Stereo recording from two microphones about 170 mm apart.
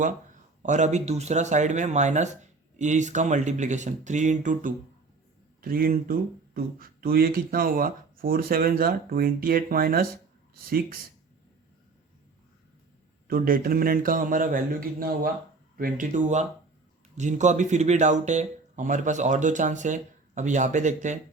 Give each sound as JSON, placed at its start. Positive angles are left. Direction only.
{"t": 0.6, "sound": "speech", "side_deg": -45}
{"t": 5.6, "sound": "speech", "side_deg": -60}
{"t": 13.2, "sound": "speech", "side_deg": -60}